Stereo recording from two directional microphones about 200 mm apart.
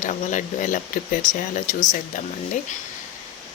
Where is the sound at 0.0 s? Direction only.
40° left (ahead or behind).